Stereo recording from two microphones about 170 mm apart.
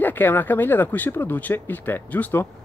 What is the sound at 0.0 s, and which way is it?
Speech, 10° left (ahead or behind).